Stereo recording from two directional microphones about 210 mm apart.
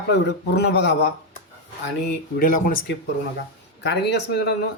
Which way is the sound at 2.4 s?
40° left (ahead or behind).